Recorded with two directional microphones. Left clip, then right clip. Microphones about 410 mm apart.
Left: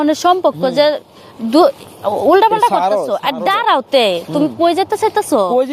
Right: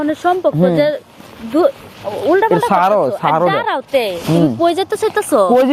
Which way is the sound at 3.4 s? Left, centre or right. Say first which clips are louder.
Left 2 dB; left.